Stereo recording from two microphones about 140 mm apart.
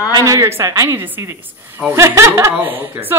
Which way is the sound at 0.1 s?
25° right (ahead or behind).